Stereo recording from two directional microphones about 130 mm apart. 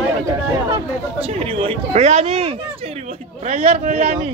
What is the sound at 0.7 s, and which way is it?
Speech, 45° right (ahead or behind).